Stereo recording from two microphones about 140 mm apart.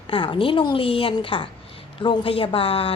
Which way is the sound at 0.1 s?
35° left (ahead or behind).